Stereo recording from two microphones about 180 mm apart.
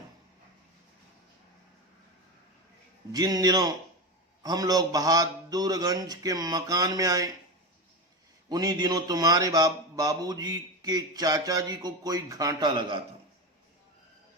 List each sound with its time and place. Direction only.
3.1 s speech: 20° right (ahead or behind)
8.4 s speech: 20° right (ahead or behind)